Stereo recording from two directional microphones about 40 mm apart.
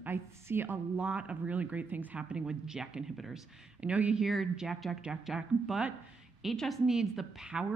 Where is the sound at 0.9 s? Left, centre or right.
Right.